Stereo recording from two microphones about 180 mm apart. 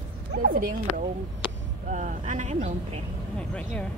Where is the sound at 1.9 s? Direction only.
45° right (ahead or behind).